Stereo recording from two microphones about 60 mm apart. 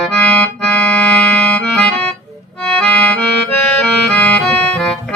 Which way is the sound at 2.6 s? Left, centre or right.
Centre.